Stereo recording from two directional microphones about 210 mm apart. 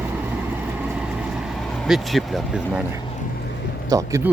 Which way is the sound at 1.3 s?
Centre (ahead or behind).